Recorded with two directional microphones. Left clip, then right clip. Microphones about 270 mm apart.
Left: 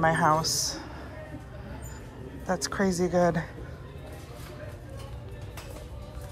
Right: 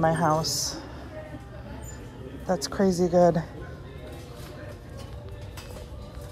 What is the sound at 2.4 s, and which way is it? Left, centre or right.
Speech, centre.